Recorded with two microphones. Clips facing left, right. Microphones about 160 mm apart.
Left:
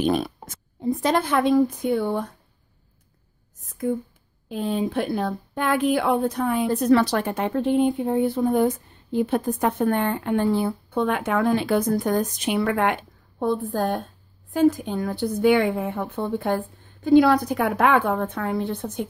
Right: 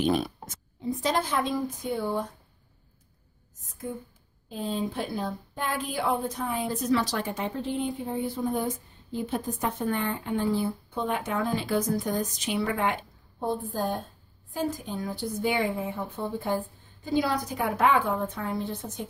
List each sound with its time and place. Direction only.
0.0 s speech: 60° left (ahead or behind)
4.5 s speech: 70° left (ahead or behind)